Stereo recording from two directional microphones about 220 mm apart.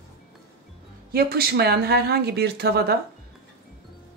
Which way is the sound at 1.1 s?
45° right (ahead or behind).